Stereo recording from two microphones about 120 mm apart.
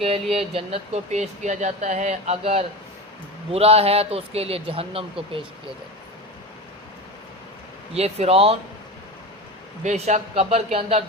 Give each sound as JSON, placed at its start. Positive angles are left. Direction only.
{"t": 0.0, "sound": "speech", "side_deg": -55}
{"t": 7.9, "sound": "speech", "side_deg": -60}
{"t": 9.8, "sound": "speech", "side_deg": -70}